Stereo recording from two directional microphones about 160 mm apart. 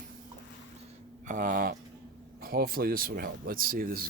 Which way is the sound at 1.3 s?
55° right (ahead or behind).